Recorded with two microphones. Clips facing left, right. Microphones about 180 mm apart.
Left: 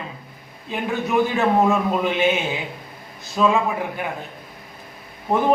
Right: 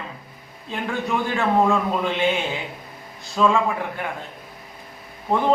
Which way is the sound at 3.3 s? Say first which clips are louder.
Even; 15° left (ahead or behind).